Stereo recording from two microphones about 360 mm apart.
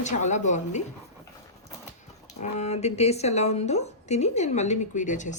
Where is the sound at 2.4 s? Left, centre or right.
Centre.